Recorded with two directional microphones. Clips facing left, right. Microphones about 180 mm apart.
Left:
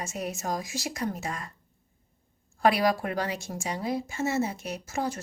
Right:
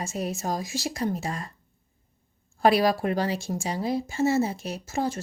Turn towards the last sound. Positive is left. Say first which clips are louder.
# right 3 dB
turn(degrees=-30)  # may be behind; listen again after turning